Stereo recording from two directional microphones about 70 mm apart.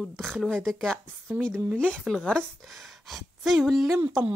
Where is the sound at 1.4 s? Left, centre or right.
Centre.